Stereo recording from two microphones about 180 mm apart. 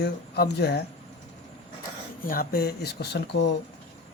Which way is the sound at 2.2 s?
55° left (ahead or behind).